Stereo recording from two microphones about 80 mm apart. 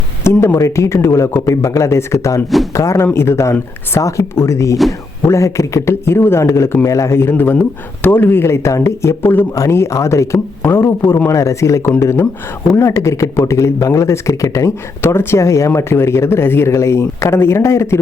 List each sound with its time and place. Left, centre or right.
0.3 s speech: left